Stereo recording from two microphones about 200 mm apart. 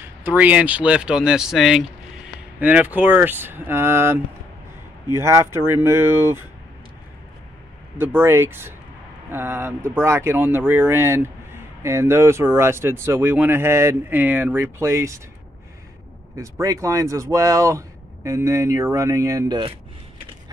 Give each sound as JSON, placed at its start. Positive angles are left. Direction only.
{"t": 0.0, "sound": "speech", "side_deg": -10}
{"t": 8.0, "sound": "speech", "side_deg": -10}
{"t": 16.3, "sound": "speech", "side_deg": -15}